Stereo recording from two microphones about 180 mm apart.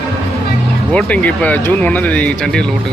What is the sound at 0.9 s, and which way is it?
Speech, 5° left (ahead or behind).